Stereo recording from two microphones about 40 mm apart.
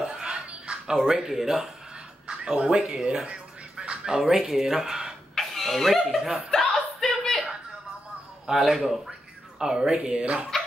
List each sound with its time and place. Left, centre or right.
0.0 s music: right
0.9 s speech: centre
3.3 s music: right
4.0 s speech: centre
5.3 s a sound: centre
6.0 s speech: centre
6.7 s a sound: centre
8.5 s speech: centre
10.5 s a sound: centre